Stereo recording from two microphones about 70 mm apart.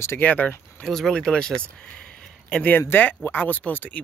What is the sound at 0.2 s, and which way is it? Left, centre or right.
Speech, left.